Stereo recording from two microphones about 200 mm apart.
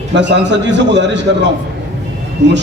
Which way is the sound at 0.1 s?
60° right (ahead or behind).